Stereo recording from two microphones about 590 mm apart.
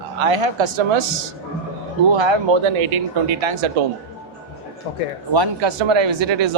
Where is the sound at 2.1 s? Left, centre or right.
Right.